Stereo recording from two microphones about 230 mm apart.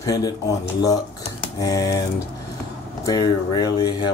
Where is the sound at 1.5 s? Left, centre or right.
Centre.